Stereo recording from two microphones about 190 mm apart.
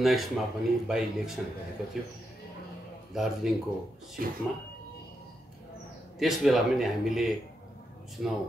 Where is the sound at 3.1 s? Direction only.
Centre (ahead or behind).